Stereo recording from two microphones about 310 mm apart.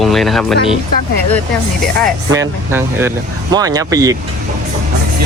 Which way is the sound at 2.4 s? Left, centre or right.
Centre.